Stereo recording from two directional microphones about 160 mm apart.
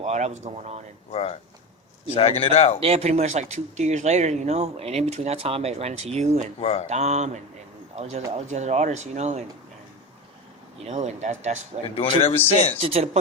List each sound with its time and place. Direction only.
0.0 s speech: 45° right (ahead or behind)
1.1 s a man's voice: 40° left (ahead or behind)
2.8 s speech: 40° right (ahead or behind)
6.6 s a man's voice: 40° left (ahead or behind)
6.8 s speech: 45° right (ahead or behind)
8.4 s speech: 45° right (ahead or behind)
10.8 s speech: 45° right (ahead or behind)
11.9 s a man's voice: 35° left (ahead or behind)
12.8 s speech: 40° right (ahead or behind)